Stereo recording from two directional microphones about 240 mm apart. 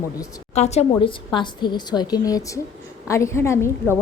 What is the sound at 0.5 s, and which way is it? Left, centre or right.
A woman's voice, left.